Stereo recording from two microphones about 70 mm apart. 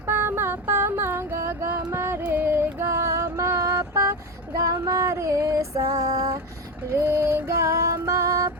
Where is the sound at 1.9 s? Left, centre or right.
Right.